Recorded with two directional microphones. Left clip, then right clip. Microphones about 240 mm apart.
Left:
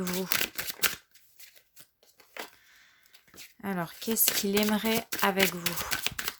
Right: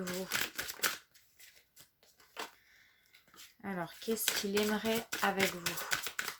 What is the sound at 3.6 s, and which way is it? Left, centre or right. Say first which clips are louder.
Speech: left 6 dB; left.